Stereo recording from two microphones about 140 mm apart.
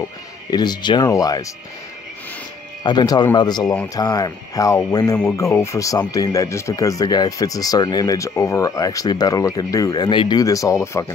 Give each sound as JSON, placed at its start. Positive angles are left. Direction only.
{"t": 0.5, "sound": "speech", "side_deg": 30}
{"t": 2.8, "sound": "speech", "side_deg": 35}